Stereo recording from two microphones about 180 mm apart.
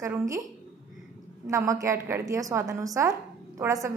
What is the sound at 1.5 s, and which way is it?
A woman's voice, 15° right (ahead or behind).